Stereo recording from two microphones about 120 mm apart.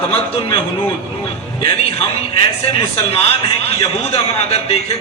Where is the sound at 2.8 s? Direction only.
55° left (ahead or behind).